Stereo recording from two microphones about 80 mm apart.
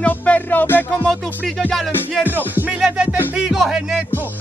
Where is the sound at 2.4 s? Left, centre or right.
Right.